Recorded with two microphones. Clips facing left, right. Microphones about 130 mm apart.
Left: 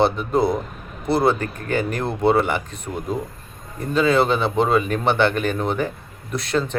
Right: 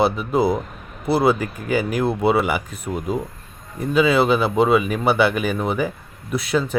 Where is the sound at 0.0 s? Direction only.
5° right (ahead or behind).